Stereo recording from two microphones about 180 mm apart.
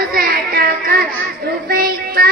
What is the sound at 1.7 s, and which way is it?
Child singing, 55° right (ahead or behind).